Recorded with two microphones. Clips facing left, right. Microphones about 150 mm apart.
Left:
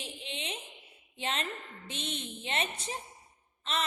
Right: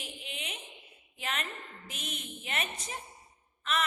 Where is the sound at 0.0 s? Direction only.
30° left (ahead or behind).